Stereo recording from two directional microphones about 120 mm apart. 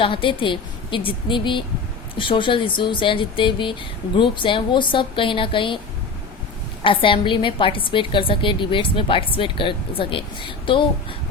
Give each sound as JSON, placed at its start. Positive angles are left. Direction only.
{"t": 0.0, "sound": "a woman's voice", "side_deg": 45}
{"t": 6.8, "sound": "a woman's voice", "side_deg": 45}